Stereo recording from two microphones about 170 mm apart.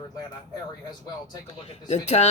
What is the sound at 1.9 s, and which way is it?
Speech, 40° left (ahead or behind).